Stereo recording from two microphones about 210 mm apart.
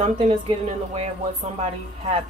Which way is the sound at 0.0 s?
30° right (ahead or behind).